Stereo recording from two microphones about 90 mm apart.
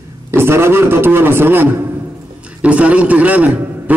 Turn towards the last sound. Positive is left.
turn(degrees=-15)  # may be behind; listen again after turning